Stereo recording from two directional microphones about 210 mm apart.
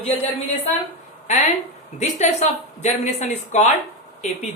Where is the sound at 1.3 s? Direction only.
30° left (ahead or behind).